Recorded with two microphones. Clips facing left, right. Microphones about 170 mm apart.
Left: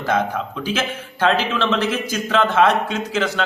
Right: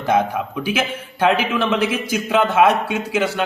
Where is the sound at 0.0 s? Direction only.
15° right (ahead or behind).